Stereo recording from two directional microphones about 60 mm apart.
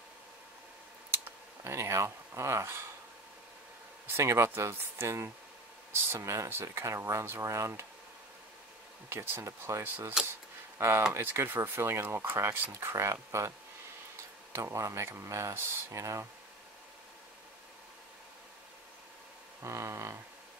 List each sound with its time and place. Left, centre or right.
1.1 s a sound: right
4.2 s speech: right
9.1 s speech: right
9.4 s speech: right
10.2 s speech: centre
10.8 s speech: right
12.8 s speech: right
19.6 s speech: right